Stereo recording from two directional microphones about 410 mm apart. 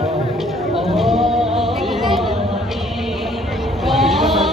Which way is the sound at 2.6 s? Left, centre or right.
Centre.